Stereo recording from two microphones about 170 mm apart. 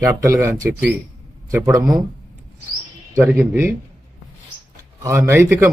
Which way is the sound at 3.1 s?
15° right (ahead or behind).